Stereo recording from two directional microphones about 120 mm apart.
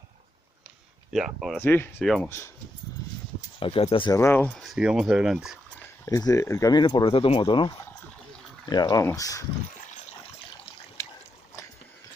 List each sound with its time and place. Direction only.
1.1 s speech: centre (ahead or behind)
1.6 s speech: 15° left (ahead or behind)
3.5 s speech: 50° left (ahead or behind)
4.1 s speech: 20° left (ahead or behind)
4.5 s speech: centre (ahead or behind)
6.0 s speech: 30° left (ahead or behind)